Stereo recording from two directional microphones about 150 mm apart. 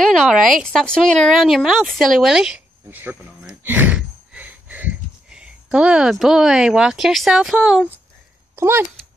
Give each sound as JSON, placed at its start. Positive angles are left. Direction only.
{"t": 0.0, "sound": "a sound", "side_deg": 0}
{"t": 0.5, "sound": "speech", "side_deg": 0}
{"t": 8.5, "sound": "speech", "side_deg": -15}